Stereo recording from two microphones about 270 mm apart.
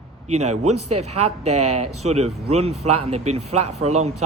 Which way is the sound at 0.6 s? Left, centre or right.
Right.